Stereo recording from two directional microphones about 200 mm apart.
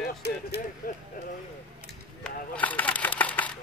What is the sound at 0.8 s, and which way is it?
Speech, 45° left (ahead or behind).